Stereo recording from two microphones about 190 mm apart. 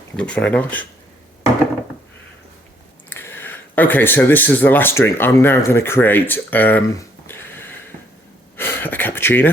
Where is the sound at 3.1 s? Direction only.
10° left (ahead or behind).